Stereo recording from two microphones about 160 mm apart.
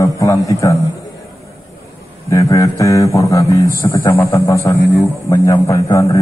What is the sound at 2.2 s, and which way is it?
Speech, 20° left (ahead or behind).